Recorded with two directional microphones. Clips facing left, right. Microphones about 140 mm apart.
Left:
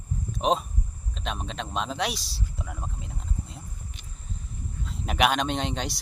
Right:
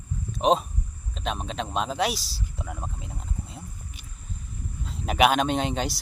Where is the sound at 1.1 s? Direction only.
Centre (ahead or behind).